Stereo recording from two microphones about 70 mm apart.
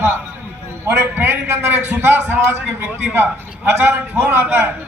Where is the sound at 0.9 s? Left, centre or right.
Right.